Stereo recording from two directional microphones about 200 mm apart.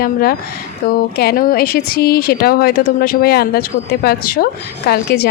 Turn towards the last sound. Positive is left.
turn(degrees=50)  # may be behind; listen again after turning